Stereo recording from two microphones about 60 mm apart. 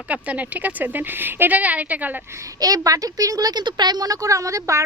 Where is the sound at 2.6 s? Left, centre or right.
Right.